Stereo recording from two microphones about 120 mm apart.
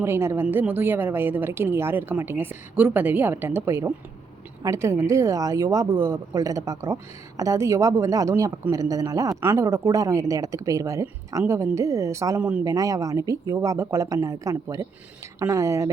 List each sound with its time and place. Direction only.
0.0 s speech: 20° right (ahead or behind)
12.4 s speech: 10° right (ahead or behind)
12.6 s speech: 30° right (ahead or behind)